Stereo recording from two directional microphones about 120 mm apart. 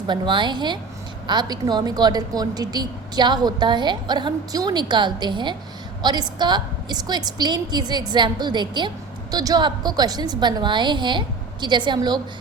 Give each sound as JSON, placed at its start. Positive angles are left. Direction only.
{"t": 0.1, "sound": "a woman's voice", "side_deg": -40}